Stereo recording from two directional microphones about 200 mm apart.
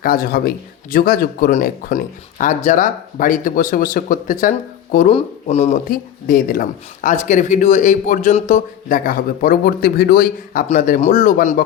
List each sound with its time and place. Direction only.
0.0 s speech: 45° left (ahead or behind)